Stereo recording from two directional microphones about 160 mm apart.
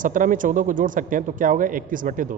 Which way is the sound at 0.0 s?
55° right (ahead or behind).